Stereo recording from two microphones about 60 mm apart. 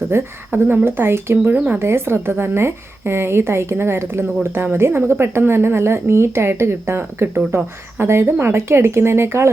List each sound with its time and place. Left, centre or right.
0.1 s a woman's voice: right
1.5 s speech: right
1.8 s a woman's voice: right